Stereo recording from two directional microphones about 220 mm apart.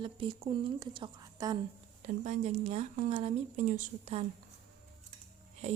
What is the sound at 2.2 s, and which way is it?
Speech, 30° right (ahead or behind).